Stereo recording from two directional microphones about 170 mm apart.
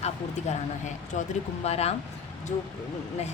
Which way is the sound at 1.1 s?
45° left (ahead or behind).